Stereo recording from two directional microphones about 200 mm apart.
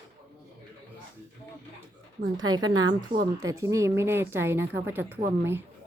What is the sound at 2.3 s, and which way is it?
Speech, 20° right (ahead or behind).